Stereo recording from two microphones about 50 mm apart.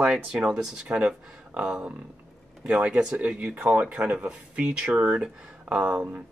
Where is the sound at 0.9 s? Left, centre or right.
Right.